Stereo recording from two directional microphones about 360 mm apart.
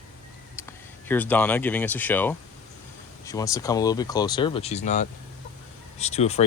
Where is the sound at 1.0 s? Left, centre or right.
Centre.